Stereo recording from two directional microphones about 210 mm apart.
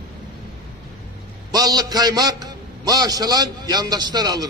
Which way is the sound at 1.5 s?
20° right (ahead or behind).